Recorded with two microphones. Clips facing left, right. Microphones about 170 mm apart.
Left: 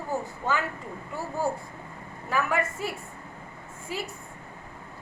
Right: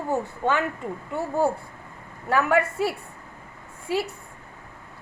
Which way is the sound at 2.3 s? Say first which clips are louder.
Right 6 dB; 70° right (ahead or behind).